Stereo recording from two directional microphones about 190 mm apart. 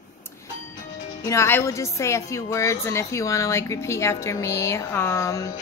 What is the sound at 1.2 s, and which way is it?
A woman's voice, 15° left (ahead or behind).